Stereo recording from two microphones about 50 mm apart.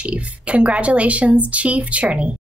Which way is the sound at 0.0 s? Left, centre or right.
Right.